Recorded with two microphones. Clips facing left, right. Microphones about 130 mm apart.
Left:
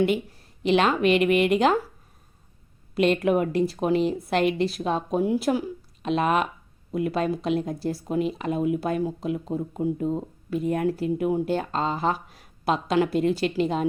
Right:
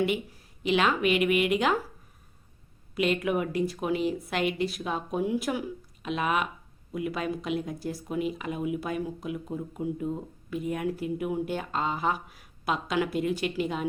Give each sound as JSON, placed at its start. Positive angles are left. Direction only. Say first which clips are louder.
{"t": 0.6, "sound": "a woman's voice", "louder": "left 4 dB", "side_deg": 35}
{"t": 2.9, "sound": "a woman's voice", "louder": "left 5 dB", "side_deg": 35}
{"t": 11.2, "sound": "a woman's voice", "louder": "left 6 dB", "side_deg": 30}